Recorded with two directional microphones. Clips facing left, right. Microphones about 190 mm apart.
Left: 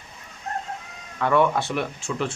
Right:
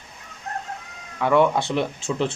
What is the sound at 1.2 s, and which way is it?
Speech, 15° right (ahead or behind).